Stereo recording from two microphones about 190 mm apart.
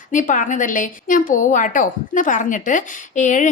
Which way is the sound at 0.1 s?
45° left (ahead or behind).